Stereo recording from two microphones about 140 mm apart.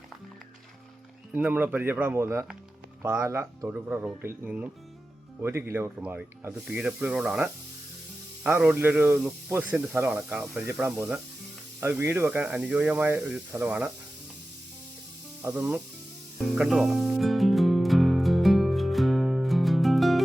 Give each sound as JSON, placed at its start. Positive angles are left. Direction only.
{"t": 1.3, "sound": "speech", "side_deg": -10}
{"t": 15.4, "sound": "speech", "side_deg": -10}
{"t": 16.6, "sound": "music", "side_deg": 0}